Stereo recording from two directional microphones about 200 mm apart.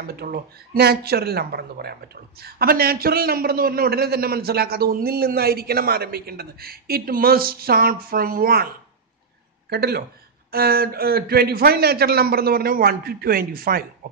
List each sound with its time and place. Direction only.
0.0 s speech: 50° right (ahead or behind)